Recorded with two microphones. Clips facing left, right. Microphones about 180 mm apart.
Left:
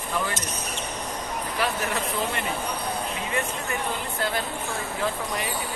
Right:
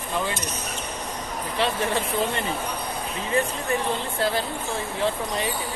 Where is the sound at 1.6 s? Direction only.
25° right (ahead or behind).